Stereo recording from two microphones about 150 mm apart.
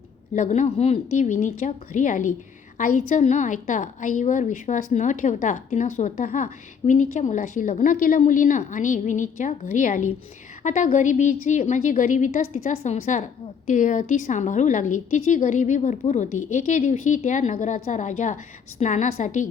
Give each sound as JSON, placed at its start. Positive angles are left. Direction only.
{"t": 0.3, "sound": "a woman's voice", "side_deg": 55}
{"t": 12.7, "sound": "a woman's voice", "side_deg": 45}